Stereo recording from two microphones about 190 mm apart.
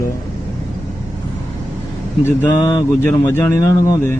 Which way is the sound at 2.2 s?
10° left (ahead or behind).